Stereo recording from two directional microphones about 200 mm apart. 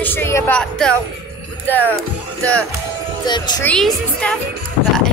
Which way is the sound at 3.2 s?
20° left (ahead or behind).